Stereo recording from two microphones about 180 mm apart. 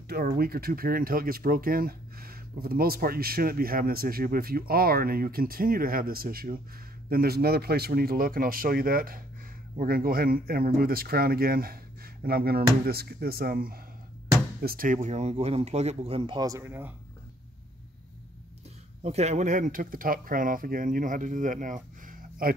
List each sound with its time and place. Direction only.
0.1 s speech: 55° right (ahead or behind); by 16.9 s 15° right (ahead or behind)
19.0 s speech: 40° right (ahead or behind)